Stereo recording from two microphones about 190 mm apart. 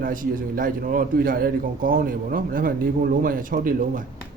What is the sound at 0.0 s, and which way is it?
A man's voice, 45° right (ahead or behind).